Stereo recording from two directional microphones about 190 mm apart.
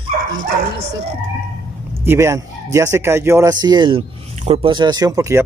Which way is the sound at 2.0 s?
15° right (ahead or behind).